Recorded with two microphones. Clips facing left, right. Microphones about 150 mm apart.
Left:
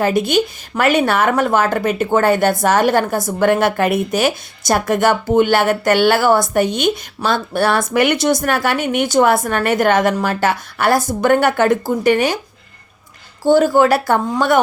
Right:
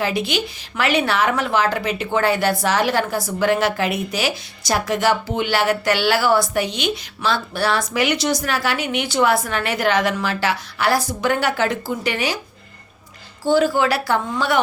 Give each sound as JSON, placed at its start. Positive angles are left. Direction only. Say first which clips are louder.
{"t": 0.0, "sound": "speech", "louder": "left 7 dB", "side_deg": 50}
{"t": 13.4, "sound": "speech", "louder": "left 5 dB", "side_deg": 45}